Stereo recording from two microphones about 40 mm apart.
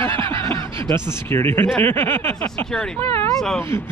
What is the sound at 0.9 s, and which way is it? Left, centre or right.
Speech, left.